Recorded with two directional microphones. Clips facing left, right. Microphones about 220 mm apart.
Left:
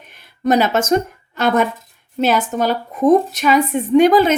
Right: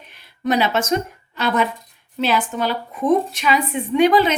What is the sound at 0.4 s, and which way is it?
A woman's voice, 45° left (ahead or behind).